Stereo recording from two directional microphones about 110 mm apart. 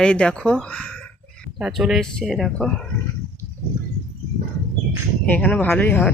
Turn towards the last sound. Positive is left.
turn(degrees=15)  # may be behind; listen again after turning